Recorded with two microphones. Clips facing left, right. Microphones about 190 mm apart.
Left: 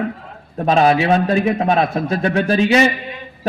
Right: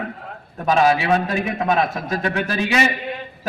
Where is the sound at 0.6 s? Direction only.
35° left (ahead or behind).